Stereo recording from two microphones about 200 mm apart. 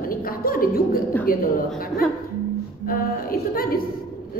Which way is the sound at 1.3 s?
45° left (ahead or behind).